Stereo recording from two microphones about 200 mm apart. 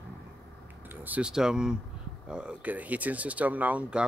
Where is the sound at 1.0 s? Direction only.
5° right (ahead or behind).